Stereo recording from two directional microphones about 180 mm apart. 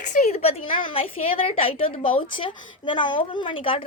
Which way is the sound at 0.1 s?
40° left (ahead or behind).